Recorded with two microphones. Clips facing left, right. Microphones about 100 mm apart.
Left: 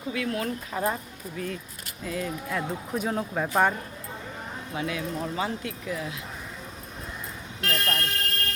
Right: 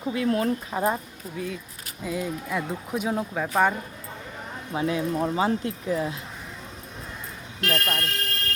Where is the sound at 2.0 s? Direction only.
10° right (ahead or behind).